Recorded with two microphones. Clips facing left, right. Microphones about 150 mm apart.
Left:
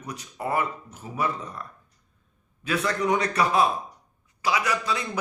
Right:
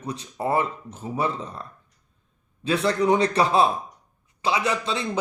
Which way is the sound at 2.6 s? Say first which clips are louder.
Right 4 dB; 30° right (ahead or behind).